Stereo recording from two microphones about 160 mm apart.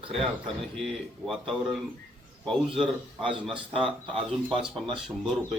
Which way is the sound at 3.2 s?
35° right (ahead or behind).